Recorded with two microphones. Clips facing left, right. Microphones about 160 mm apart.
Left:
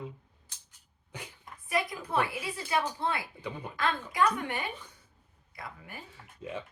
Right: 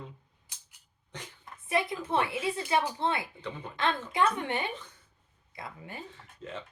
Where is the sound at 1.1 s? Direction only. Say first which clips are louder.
Even; 10° left (ahead or behind).